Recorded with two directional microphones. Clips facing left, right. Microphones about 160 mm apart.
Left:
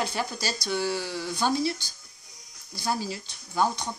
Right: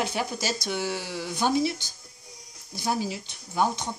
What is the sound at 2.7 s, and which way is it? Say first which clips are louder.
Speech: right 2 dB; 15° right (ahead or behind).